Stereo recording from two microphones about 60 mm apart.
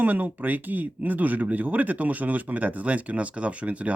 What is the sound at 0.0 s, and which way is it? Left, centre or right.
Speech, right.